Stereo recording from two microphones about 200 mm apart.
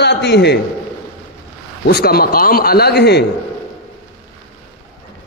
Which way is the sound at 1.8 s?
50° left (ahead or behind).